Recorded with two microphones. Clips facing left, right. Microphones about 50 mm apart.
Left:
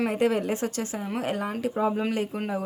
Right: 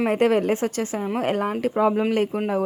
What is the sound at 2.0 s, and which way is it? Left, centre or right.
Speech, right.